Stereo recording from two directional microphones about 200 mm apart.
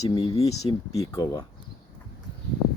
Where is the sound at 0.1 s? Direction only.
20° left (ahead or behind).